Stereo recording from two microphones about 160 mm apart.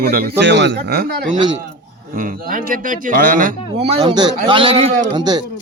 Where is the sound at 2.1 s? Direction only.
60° right (ahead or behind).